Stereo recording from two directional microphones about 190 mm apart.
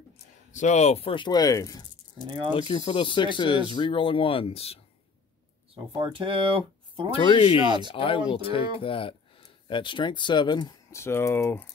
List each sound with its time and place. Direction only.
0.5 s speech: 40° left (ahead or behind); by 1.9 s 20° left (ahead or behind)
2.2 s speech: 25° right (ahead or behind)
2.7 s speech: 25° left (ahead or behind)
5.9 s speech: 25° right (ahead or behind)
7.1 s speech: 30° left (ahead or behind); by 11.6 s 15° left (ahead or behind)